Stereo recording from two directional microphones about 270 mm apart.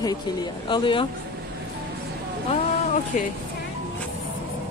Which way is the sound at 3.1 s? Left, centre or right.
Left.